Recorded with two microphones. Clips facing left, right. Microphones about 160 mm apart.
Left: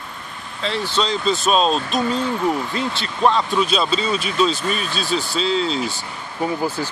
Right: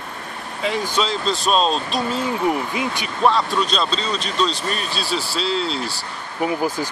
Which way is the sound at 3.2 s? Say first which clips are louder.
Left 1 dB; centre (ahead or behind).